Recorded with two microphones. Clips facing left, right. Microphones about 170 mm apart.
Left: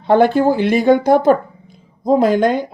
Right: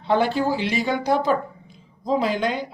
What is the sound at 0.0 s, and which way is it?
Speech, 50° left (ahead or behind).